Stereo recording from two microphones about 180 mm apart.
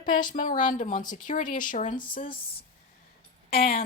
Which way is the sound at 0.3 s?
45° left (ahead or behind).